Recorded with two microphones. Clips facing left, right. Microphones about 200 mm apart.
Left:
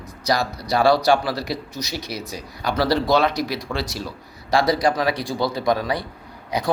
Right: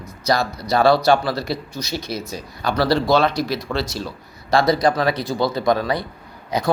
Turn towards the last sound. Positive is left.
turn(degrees=15)  # may be behind; listen again after turning